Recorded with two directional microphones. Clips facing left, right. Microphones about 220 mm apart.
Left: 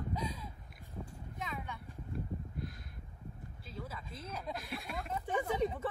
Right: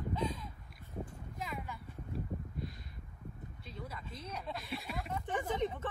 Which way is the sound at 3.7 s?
5° left (ahead or behind).